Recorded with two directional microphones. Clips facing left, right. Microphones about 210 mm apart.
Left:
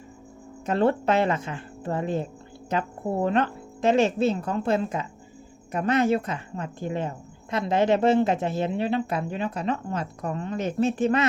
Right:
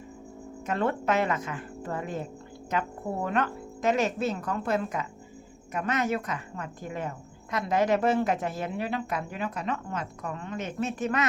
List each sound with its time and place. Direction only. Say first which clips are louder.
0.6 s a woman's voice: left 6 dB; 30° left (ahead or behind)